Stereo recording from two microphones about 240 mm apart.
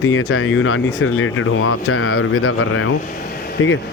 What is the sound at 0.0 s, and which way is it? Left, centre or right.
Speech, left.